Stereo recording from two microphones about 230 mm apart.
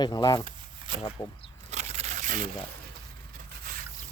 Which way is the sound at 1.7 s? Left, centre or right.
Right.